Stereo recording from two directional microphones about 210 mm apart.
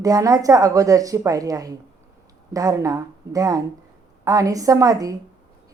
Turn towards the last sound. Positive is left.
turn(degrees=-15)  # may be behind; listen again after turning